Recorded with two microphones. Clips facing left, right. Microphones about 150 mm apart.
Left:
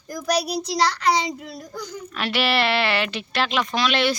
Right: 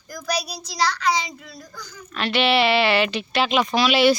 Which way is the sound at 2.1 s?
5° left (ahead or behind).